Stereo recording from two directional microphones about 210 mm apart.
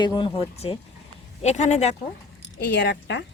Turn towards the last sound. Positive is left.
turn(degrees=55)  # may be behind; listen again after turning